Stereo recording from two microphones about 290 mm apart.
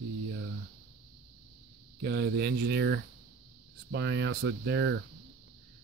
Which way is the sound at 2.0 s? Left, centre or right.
Right.